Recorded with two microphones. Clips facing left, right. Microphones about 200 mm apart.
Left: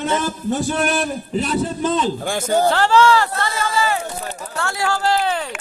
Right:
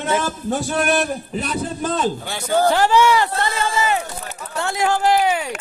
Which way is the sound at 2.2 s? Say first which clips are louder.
Left 4 dB; 45° left (ahead or behind).